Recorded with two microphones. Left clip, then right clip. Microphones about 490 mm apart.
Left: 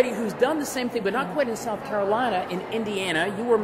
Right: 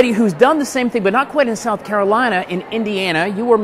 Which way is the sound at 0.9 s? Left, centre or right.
Right.